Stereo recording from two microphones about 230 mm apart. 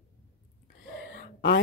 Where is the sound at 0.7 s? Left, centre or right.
Left.